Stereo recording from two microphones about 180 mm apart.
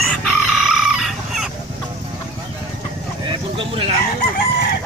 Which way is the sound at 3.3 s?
30° right (ahead or behind).